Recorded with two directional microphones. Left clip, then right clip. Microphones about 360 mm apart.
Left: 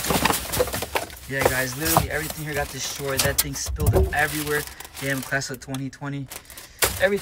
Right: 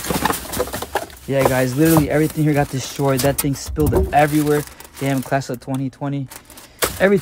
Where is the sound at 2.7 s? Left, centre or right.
Centre.